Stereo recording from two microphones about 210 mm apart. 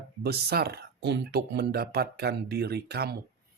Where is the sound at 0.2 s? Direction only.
50° right (ahead or behind).